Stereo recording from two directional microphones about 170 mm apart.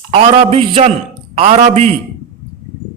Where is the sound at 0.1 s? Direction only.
35° right (ahead or behind).